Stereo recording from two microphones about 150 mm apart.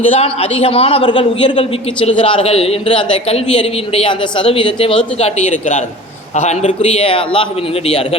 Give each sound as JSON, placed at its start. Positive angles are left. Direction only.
{"t": 0.0, "sound": "a man's voice", "side_deg": 40}
{"t": 5.2, "sound": "a man's voice", "side_deg": 55}